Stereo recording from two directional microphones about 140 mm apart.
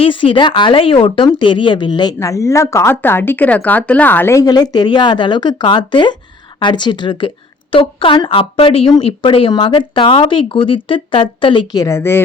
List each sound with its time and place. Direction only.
0.0 s speech: 40° left (ahead or behind); by 12.2 s 15° left (ahead or behind)